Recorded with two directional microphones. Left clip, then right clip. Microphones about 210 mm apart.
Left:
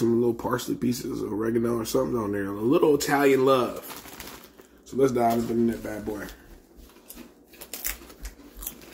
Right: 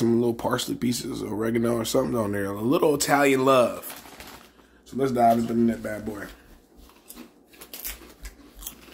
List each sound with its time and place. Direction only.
0.0 s speech: 25° right (ahead or behind)
4.9 s speech: 30° right (ahead or behind)